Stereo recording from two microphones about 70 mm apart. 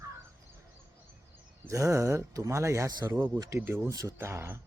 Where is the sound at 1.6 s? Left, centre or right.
Right.